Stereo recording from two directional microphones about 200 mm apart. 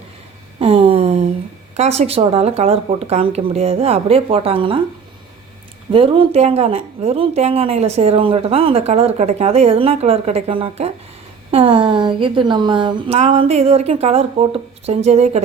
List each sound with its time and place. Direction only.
0.6 s a sound: 30° right (ahead or behind)
1.7 s speech: 30° right (ahead or behind)
5.9 s a woman's voice: 25° right (ahead or behind)